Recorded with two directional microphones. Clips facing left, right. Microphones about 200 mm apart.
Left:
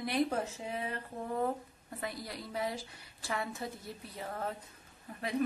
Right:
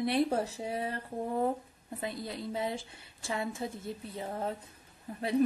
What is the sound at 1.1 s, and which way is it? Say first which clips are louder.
Speech: right 5 dB; 50° right (ahead or behind).